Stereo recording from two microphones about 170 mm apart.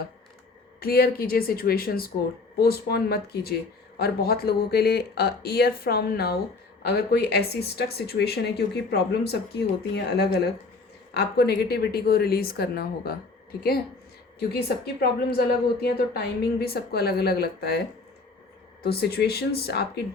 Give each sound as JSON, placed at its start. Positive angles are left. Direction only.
{"t": 0.8, "sound": "speech", "side_deg": 60}
{"t": 15.0, "sound": "speech", "side_deg": 65}